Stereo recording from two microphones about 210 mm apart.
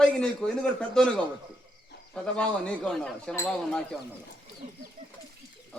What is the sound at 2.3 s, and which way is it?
A man's voice, 5° left (ahead or behind).